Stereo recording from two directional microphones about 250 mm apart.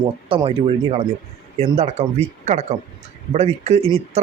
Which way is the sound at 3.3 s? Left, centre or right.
Right.